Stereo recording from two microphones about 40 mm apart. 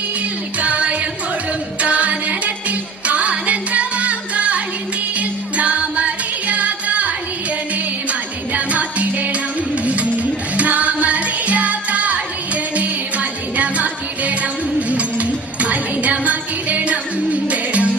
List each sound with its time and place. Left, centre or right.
0.6 s music: right
8.5 s music: right